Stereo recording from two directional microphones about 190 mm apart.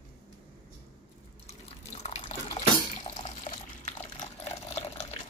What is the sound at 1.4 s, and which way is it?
Water, 35° left (ahead or behind).